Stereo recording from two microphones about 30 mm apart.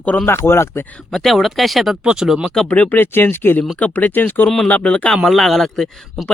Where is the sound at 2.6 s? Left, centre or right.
Left.